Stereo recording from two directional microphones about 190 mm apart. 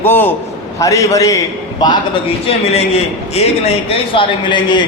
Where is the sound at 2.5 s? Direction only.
35° left (ahead or behind).